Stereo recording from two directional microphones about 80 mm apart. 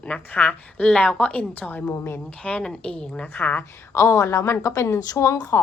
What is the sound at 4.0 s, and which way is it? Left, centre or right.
A woman's voice, left.